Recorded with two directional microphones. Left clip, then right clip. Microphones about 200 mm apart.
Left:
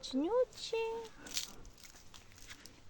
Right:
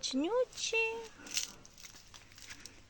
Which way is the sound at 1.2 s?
20° right (ahead or behind).